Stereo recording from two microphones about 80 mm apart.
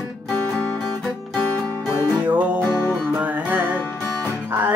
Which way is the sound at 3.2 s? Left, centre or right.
Centre.